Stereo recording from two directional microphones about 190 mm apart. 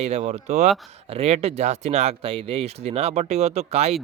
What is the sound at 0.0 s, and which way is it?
Speech, 35° right (ahead or behind).